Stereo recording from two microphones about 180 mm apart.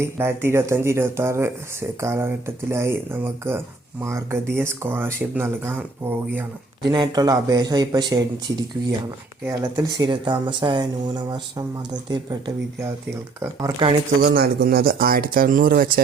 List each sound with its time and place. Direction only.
0.0 s speech: 15° right (ahead or behind)
6.9 s speech: 25° right (ahead or behind)
9.4 s speech: 15° right (ahead or behind)
13.6 s speech: 25° right (ahead or behind)
14.2 s speech: 60° right (ahead or behind)